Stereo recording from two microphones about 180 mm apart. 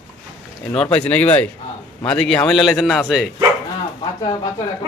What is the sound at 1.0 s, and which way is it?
A man's voice, 10° left (ahead or behind).